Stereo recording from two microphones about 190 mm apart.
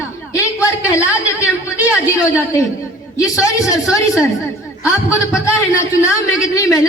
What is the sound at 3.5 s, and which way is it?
Speech, 15° left (ahead or behind).